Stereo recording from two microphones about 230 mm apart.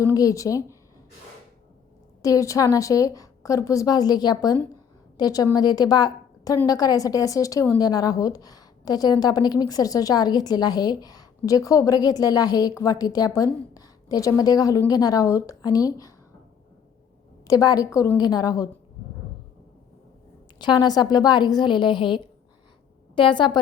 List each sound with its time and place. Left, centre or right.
0.0 s a woman's voice: centre
2.2 s a woman's voice: centre
17.4 s a woman's voice: centre
20.6 s a woman's voice: centre